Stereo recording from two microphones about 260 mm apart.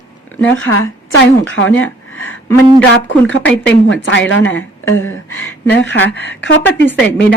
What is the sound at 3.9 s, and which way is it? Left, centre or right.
Speech, left.